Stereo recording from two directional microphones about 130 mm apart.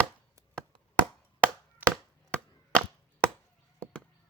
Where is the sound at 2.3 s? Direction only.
10° left (ahead or behind).